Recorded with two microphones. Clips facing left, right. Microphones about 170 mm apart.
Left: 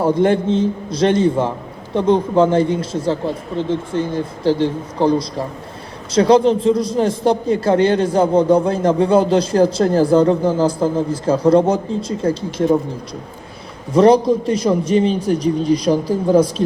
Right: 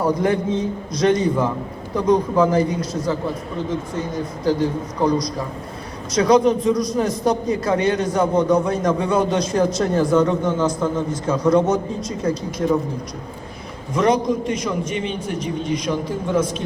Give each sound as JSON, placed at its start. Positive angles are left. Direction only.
{"t": 0.0, "sound": "a man's voice", "side_deg": 25}
{"t": 13.9, "sound": "a man's voice", "side_deg": 30}